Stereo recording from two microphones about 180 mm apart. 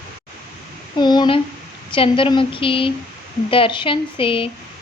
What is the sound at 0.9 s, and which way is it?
A woman's voice, 25° left (ahead or behind).